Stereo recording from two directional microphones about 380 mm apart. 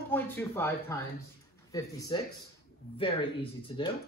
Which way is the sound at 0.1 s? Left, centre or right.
Centre.